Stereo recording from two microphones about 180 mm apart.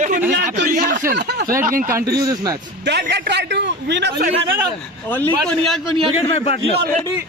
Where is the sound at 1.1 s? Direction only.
70° right (ahead or behind).